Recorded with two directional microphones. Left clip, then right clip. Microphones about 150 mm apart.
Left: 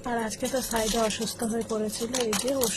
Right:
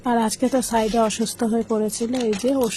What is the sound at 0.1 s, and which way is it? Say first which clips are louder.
Speech: right 8 dB; 15° right (ahead or behind).